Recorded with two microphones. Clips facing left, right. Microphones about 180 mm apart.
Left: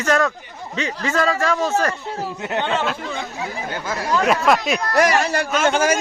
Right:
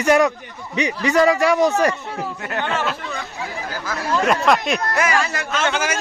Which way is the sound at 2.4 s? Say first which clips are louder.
Left 3 dB; 20° left (ahead or behind).